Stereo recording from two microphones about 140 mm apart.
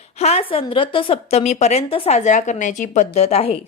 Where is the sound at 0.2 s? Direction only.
45° left (ahead or behind).